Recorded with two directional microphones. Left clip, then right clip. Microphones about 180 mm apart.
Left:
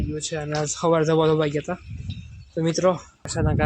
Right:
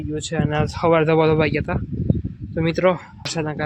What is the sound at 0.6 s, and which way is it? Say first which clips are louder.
Speech: right 3 dB; 10° right (ahead or behind).